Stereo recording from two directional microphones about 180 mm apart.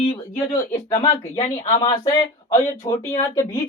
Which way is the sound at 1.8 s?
20° left (ahead or behind).